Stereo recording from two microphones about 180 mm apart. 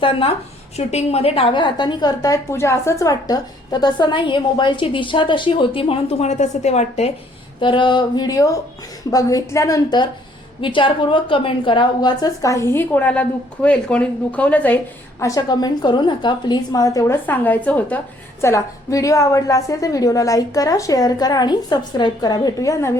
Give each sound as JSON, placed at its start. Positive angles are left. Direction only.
{"t": 0.0, "sound": "a woman's voice", "side_deg": 30}
{"t": 7.6, "sound": "a woman's voice", "side_deg": 25}
{"t": 15.2, "sound": "a woman's voice", "side_deg": 20}